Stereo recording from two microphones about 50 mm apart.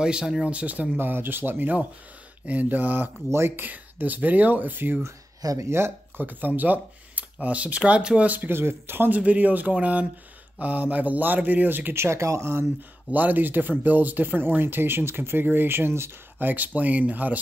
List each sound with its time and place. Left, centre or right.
0.0 s speech: centre
0.5 s speech: right
0.9 s speech: right
3.3 s speech: right
3.5 s speech: right
5.6 s speech: right
6.2 s speech: right
8.5 s speech: right
9.2 s speech: right
11.9 s speech: right
13.1 s speech: right
16.3 s speech: right